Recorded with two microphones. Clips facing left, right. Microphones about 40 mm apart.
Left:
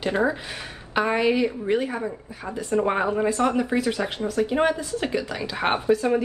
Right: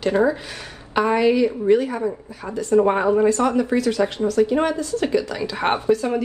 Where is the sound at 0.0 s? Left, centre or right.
Centre.